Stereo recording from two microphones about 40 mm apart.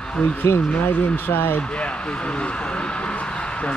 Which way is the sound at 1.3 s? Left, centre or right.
Left.